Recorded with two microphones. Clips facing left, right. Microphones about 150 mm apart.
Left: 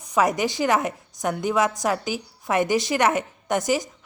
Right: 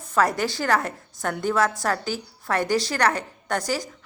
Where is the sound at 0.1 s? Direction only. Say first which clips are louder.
Left 1 dB; 15° left (ahead or behind).